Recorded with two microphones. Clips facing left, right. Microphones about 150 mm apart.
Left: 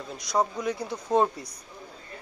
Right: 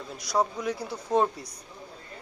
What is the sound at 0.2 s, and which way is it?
A man's voice, 5° right (ahead or behind).